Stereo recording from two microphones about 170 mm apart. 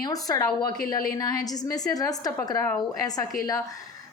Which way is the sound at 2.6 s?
10° left (ahead or behind).